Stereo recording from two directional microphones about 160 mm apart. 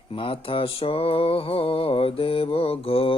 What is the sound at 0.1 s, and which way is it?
Mantra, 35° left (ahead or behind).